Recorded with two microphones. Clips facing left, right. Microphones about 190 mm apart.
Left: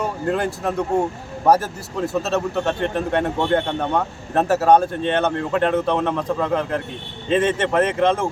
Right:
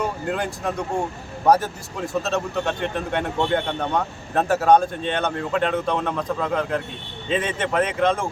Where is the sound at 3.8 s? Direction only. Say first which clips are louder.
Left 2 dB; 5° left (ahead or behind).